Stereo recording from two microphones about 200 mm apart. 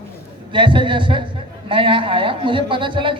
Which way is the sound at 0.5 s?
25° right (ahead or behind).